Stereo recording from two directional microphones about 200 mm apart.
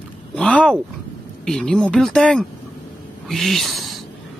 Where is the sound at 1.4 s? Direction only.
5° left (ahead or behind).